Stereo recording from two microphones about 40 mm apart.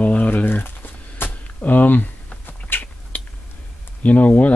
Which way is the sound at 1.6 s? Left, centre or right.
Left.